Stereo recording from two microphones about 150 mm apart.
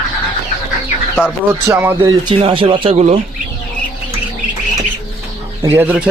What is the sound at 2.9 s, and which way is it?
Speech, 50° right (ahead or behind).